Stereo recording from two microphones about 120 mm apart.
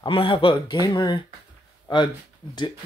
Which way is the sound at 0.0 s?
45° left (ahead or behind).